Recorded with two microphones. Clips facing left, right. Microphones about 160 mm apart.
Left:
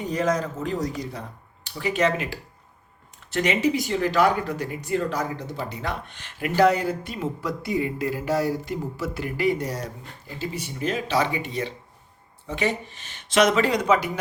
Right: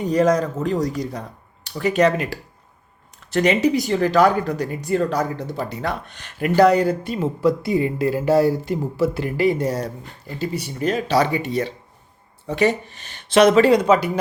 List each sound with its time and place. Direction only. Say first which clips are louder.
0.1 s speech: right 7 dB; 40° right (ahead or behind)